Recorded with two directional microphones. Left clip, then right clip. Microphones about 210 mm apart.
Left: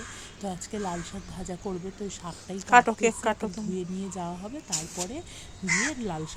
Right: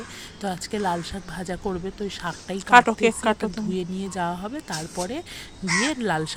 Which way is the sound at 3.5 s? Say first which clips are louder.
Right 5 dB; 15° right (ahead or behind).